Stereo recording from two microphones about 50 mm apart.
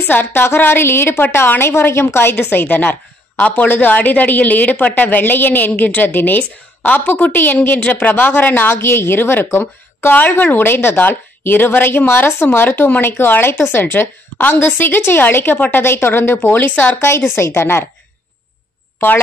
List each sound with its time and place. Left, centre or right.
0.0 s a woman's voice: left
2.5 s a woman's voice: left
15.8 s speech: left
16.5 s a woman's voice: left
17.6 s a woman's voice: left